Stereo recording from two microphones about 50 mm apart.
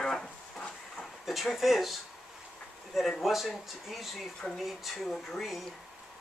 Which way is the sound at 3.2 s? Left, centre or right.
Centre.